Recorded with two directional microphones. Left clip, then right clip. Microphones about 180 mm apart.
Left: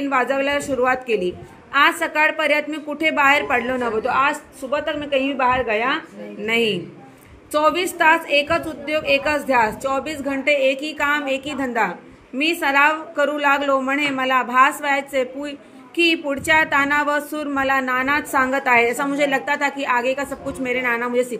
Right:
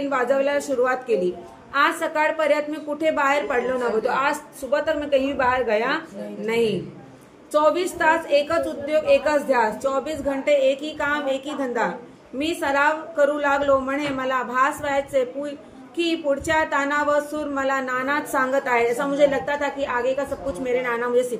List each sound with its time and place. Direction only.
0.1 s speech: 25° left (ahead or behind)
6.4 s speech: 25° left (ahead or behind)